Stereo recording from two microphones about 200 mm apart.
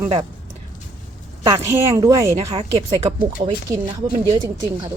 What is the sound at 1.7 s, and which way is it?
Speech, 15° right (ahead or behind).